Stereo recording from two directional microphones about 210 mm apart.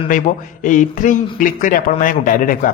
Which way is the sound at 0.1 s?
40° left (ahead or behind).